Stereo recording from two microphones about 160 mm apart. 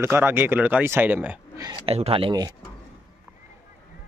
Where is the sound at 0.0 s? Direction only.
15° right (ahead or behind).